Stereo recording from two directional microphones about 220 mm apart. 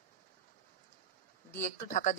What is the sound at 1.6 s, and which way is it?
Speech, 35° left (ahead or behind).